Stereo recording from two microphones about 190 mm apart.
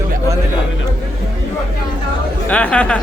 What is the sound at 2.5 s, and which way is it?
Speech, 5° left (ahead or behind).